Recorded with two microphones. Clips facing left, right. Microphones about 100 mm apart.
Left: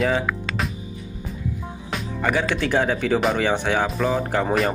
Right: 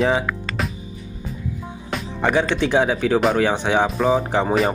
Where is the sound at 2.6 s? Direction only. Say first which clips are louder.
Right 3 dB; 10° right (ahead or behind).